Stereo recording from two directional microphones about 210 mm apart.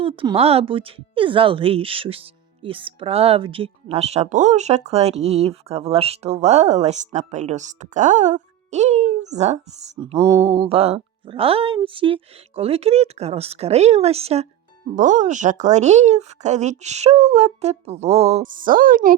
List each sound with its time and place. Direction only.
0.0 s speech: 25° right (ahead or behind)
10.2 s mantra: 15° right (ahead or behind)
10.5 s speech: 25° right (ahead or behind); by 19.1 s 40° right (ahead or behind)